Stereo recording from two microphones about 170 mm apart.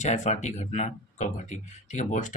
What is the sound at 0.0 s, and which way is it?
Speech, 45° left (ahead or behind).